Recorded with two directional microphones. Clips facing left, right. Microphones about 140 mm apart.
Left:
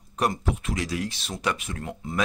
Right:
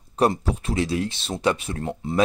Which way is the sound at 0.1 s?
30° right (ahead or behind).